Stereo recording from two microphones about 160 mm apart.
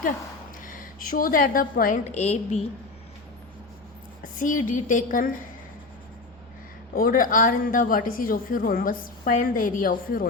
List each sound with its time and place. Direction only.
0.6 s a woman's voice: 55° left (ahead or behind)
4.2 s a woman's voice: 55° left (ahead or behind)
6.9 s a woman's voice: 60° left (ahead or behind)